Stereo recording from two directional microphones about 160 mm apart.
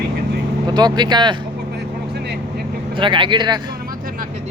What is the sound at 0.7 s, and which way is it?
Speech, 25° right (ahead or behind).